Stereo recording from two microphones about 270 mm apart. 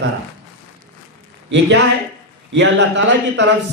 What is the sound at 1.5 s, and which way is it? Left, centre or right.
Speech, right.